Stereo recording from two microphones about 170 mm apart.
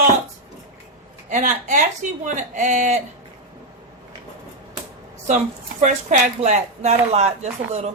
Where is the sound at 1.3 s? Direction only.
50° right (ahead or behind).